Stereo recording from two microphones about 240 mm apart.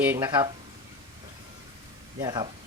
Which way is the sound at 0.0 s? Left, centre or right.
Centre.